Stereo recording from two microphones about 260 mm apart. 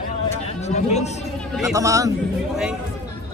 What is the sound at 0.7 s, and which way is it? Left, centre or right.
Speech, left.